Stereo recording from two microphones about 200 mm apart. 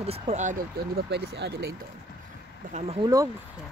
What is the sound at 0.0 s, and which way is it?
Speech, 30° right (ahead or behind).